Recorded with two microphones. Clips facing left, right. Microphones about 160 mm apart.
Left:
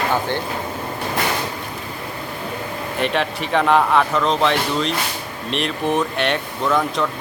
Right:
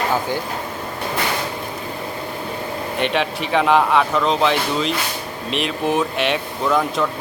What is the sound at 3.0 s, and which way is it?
Speech, centre (ahead or behind).